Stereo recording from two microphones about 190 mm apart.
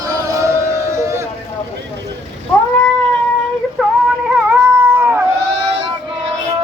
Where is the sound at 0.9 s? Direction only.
15° right (ahead or behind).